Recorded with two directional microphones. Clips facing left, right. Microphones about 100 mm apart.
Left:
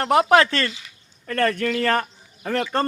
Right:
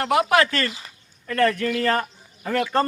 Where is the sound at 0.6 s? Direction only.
35° right (ahead or behind).